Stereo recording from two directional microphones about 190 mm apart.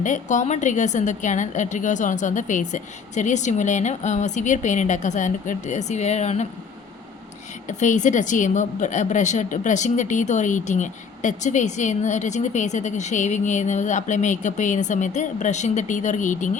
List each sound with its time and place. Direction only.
0.0 s a woman's voice: 40° left (ahead or behind)
7.7 s a woman's voice: 40° left (ahead or behind)